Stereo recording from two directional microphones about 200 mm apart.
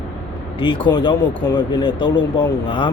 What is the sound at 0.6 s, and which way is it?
Speech, 25° left (ahead or behind).